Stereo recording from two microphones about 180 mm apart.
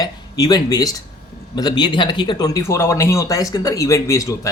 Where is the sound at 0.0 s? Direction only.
20° left (ahead or behind).